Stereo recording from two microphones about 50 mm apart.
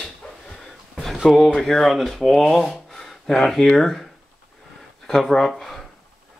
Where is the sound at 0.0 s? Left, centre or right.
Centre.